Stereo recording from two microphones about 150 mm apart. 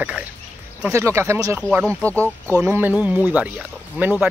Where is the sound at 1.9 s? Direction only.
10° left (ahead or behind).